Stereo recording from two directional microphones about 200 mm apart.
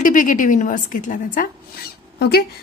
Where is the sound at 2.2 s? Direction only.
50° left (ahead or behind).